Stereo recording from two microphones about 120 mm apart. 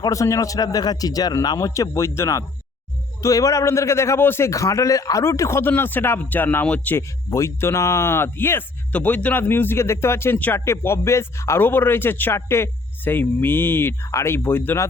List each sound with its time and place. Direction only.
0.0 s speech: 25° left (ahead or behind)
7.3 s speech: 25° left (ahead or behind)